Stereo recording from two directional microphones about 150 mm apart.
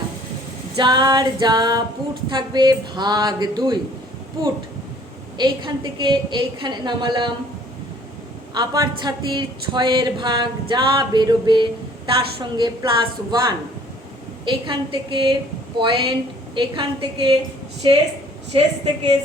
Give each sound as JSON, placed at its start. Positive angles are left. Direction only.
{"t": 0.8, "sound": "speech", "side_deg": -30}
{"t": 5.4, "sound": "a woman's voice", "side_deg": -30}
{"t": 8.5, "sound": "a woman's voice", "side_deg": -25}